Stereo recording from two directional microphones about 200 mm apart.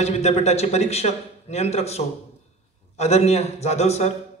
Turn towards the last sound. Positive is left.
turn(degrees=35)  # may be behind; listen again after turning